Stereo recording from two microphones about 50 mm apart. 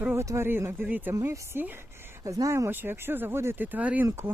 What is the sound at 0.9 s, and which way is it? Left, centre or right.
Speech, right.